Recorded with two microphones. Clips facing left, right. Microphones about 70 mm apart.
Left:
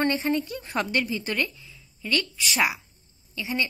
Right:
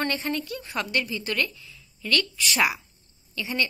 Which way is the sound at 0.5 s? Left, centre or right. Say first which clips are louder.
Left 2 dB; left.